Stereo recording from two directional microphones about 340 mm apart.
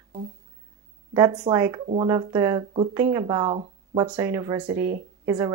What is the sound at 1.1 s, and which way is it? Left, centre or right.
Speech, centre.